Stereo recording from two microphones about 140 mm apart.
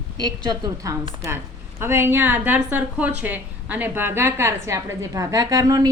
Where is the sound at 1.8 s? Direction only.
15° right (ahead or behind).